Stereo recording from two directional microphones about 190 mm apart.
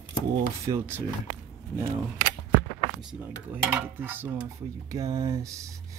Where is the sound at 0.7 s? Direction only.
15° right (ahead or behind).